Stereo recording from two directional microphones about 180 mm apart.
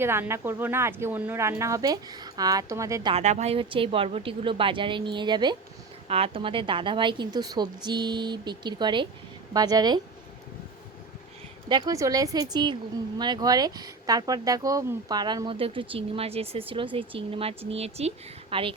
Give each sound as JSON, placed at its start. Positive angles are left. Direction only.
{"t": 0.0, "sound": "speech", "side_deg": -15}
{"t": 3.2, "sound": "speech", "side_deg": -40}
{"t": 11.7, "sound": "speech", "side_deg": -20}